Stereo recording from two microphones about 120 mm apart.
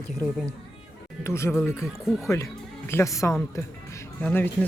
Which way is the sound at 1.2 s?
20° left (ahead or behind).